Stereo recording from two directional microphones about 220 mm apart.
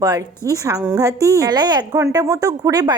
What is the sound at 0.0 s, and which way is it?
A woman's voice, 15° right (ahead or behind).